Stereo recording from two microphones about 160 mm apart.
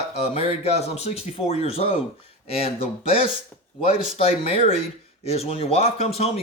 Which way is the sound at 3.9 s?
40° left (ahead or behind).